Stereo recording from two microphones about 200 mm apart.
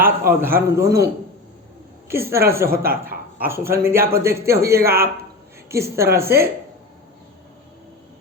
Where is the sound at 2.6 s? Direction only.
50° right (ahead or behind).